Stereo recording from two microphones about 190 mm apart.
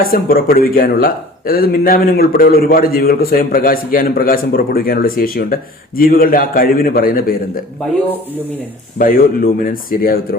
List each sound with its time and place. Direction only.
0.0 s speech: 50° left (ahead or behind)
9.0 s speech: 50° left (ahead or behind)